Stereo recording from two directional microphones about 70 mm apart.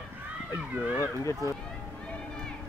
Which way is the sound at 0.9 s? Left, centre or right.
Left.